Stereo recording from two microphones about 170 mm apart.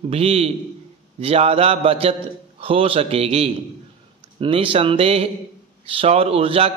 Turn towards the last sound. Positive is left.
turn(degrees=-35)  # may be behind; listen again after turning